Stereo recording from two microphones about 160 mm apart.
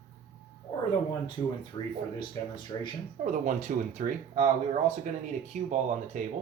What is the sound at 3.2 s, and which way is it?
Speech, 50° right (ahead or behind).